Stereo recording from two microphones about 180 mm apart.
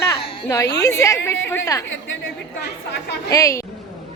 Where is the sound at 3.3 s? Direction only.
15° left (ahead or behind).